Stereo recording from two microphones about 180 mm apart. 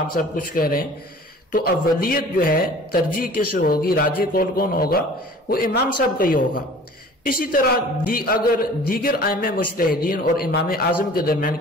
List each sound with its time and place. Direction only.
0.1 s a man's voice: 50° left (ahead or behind)